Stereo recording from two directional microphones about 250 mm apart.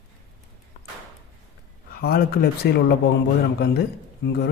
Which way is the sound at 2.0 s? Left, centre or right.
Left.